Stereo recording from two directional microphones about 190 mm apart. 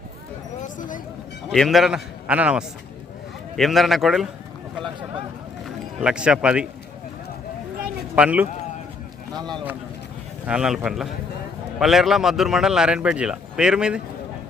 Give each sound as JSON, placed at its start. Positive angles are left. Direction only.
{"t": 0.6, "sound": "a sound", "side_deg": 45}
{"t": 1.5, "sound": "speech", "side_deg": 0}
{"t": 5.6, "sound": "speech", "side_deg": -5}
{"t": 8.1, "sound": "speech", "side_deg": -5}
{"t": 10.4, "sound": "speech", "side_deg": -5}